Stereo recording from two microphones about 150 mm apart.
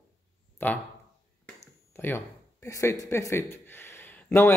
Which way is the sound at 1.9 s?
15° left (ahead or behind).